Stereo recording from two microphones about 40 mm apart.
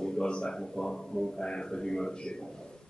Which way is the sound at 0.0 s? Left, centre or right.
Left.